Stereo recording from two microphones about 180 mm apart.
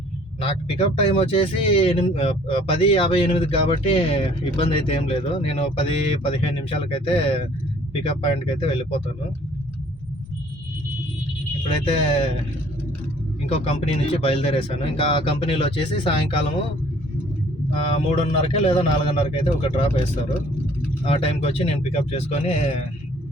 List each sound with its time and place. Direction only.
0.3 s speech: 35° left (ahead or behind)
11.7 s speech: 35° left (ahead or behind)
13.7 s speech: 30° left (ahead or behind)
17.8 s speech: 35° left (ahead or behind)
21.0 s speech: 30° left (ahead or behind)